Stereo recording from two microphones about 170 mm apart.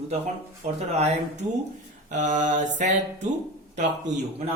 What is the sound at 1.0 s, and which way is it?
Speech, 40° right (ahead or behind).